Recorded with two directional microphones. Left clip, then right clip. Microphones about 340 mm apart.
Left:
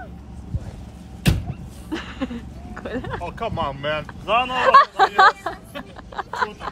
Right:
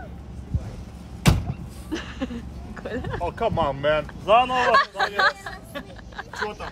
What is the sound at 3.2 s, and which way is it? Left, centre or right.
Speech, right.